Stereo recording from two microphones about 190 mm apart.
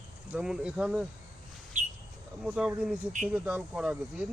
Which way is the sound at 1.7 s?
40° right (ahead or behind).